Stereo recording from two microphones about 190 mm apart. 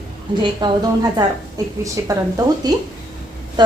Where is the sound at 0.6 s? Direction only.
20° right (ahead or behind).